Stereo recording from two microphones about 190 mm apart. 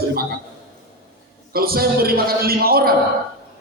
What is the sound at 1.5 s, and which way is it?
A man's voice, 50° right (ahead or behind).